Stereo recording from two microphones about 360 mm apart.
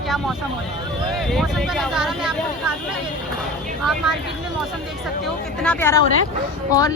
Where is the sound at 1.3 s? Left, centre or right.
Centre.